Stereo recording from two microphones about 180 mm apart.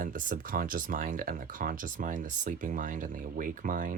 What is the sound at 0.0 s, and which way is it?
Speech, 45° right (ahead or behind).